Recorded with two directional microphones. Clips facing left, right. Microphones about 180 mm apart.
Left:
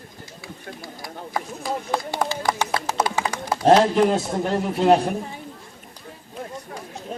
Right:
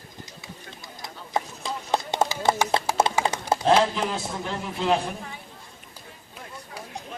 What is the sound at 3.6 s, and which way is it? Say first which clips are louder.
Speech: left 7 dB; 50° left (ahead or behind).